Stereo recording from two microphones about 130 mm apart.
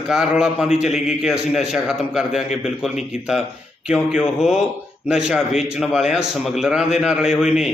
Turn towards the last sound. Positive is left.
turn(degrees=-5)  # may be behind; listen again after turning